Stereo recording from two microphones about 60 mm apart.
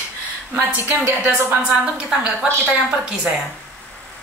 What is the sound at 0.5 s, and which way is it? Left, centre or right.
Speech, right.